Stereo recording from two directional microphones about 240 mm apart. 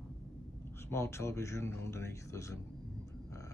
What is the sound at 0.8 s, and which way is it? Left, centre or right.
Speech, centre.